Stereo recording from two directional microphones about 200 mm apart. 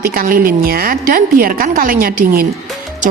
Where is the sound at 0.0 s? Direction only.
45° right (ahead or behind).